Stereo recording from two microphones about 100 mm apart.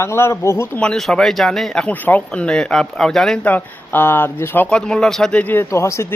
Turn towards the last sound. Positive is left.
turn(degrees=30)  # may be behind; listen again after turning